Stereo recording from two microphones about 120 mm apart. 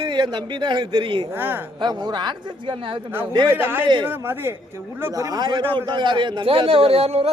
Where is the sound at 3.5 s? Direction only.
15° right (ahead or behind).